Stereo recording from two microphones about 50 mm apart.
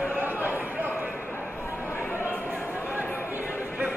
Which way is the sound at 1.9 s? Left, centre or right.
Left.